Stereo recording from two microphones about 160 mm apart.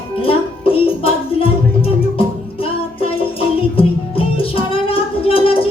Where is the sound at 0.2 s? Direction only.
35° left (ahead or behind).